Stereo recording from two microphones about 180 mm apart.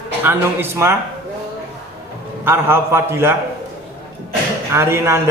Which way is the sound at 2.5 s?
15° right (ahead or behind).